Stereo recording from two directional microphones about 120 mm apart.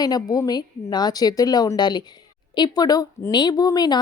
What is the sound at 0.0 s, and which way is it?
Speech, 30° left (ahead or behind).